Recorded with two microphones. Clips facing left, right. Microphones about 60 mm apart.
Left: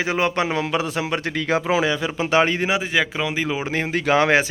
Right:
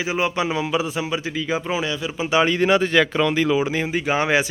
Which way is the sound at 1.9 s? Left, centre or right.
Left.